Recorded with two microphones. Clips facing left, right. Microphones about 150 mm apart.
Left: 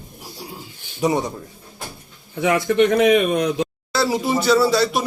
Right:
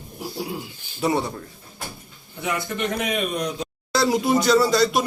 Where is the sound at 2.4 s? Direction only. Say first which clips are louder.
Left 10 dB; 90° left.